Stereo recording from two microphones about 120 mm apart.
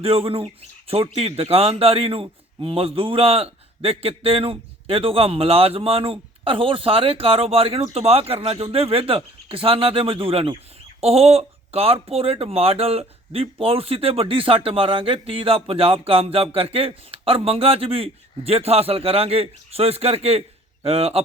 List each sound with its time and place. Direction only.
0.0 s a man's voice: 50° right (ahead or behind)